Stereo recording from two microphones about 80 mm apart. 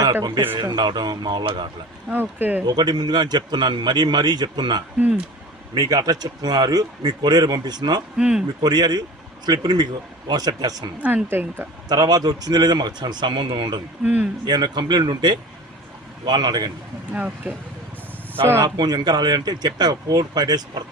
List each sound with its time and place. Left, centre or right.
0.6 s speech: right
2.0 s speech: right
2.6 s speech: right
4.9 s speech: centre
5.7 s speech: right
8.2 s speech: centre
8.6 s speech: right
11.0 s speech: right
11.9 s speech: right
14.0 s speech: centre
14.4 s speech: right
17.1 s speech: centre
18.6 s speech: right